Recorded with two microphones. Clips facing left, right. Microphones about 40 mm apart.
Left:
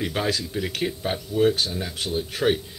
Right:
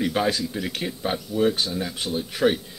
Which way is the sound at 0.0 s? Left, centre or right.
Centre.